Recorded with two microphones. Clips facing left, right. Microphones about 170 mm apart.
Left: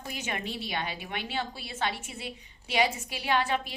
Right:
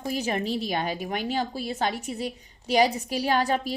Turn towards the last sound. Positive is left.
turn(degrees=-40)  # may be behind; listen again after turning